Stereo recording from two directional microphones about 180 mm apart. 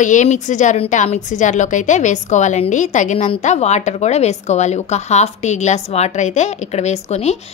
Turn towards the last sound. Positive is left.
turn(degrees=35)  # may be behind; listen again after turning